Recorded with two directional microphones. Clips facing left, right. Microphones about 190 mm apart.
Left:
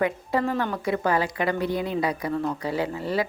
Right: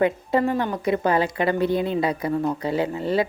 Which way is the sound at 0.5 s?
15° right (ahead or behind).